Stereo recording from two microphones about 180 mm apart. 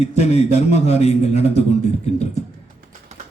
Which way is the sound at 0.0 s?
35° left (ahead or behind).